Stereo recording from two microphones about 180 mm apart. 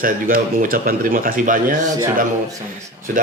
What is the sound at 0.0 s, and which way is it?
A man's voice, 50° right (ahead or behind).